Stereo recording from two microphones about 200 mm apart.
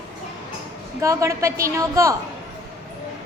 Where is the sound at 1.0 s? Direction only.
15° right (ahead or behind).